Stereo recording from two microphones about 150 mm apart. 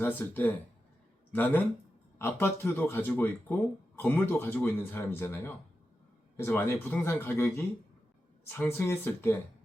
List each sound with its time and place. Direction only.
0.0 s speech: 10° left (ahead or behind)